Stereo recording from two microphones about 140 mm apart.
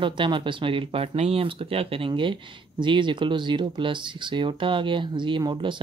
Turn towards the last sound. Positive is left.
turn(degrees=-35)  # may be behind; listen again after turning